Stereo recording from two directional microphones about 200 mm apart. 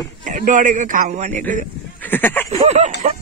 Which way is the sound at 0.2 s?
40° right (ahead or behind).